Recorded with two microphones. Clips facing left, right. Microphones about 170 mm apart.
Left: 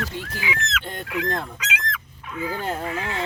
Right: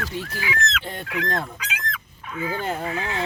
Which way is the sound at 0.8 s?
Centre (ahead or behind).